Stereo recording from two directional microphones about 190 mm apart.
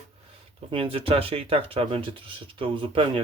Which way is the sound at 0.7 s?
30° right (ahead or behind).